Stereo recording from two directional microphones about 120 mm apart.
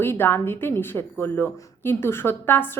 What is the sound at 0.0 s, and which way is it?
Speech, 20° left (ahead or behind).